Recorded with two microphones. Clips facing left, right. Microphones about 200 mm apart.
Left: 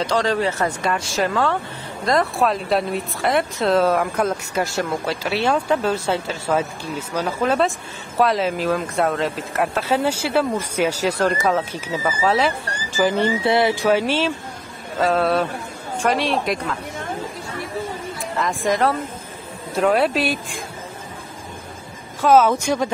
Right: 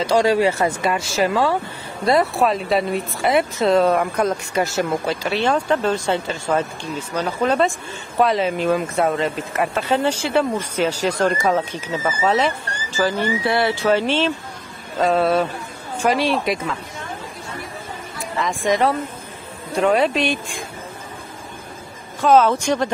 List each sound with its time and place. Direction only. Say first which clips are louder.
0.0 s speech: right 4 dB; 10° right (ahead or behind); by 12.5 s 5° left (ahead or behind)
12.9 s speech: left 2 dB; 20° left (ahead or behind); by 16.7 s centre (ahead or behind)
18.4 s speech: right 1 dB; centre (ahead or behind)
22.2 s speech: even; 10° left (ahead or behind)